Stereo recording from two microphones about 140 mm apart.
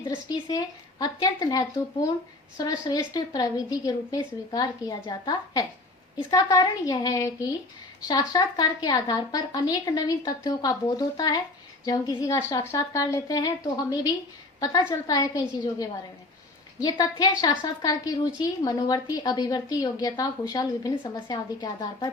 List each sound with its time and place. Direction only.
0.1 s a woman's voice: 25° left (ahead or behind)